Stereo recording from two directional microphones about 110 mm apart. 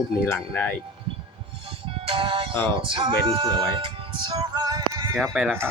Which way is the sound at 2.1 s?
55° right (ahead or behind).